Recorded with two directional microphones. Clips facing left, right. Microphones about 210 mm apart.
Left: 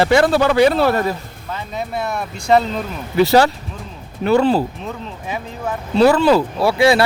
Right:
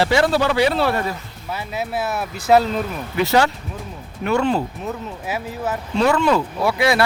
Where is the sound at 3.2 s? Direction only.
35° left (ahead or behind).